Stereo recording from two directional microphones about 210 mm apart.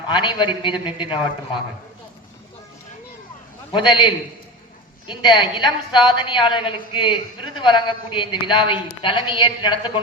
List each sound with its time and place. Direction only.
0.1 s a woman's voice: 20° left (ahead or behind)
3.7 s a woman's voice: 20° left (ahead or behind)